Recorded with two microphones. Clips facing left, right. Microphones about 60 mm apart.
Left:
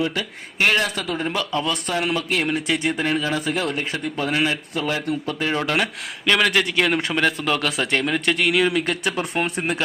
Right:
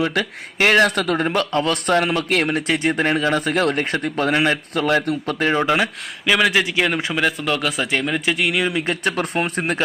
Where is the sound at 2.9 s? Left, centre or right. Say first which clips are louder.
Right 4 dB; right.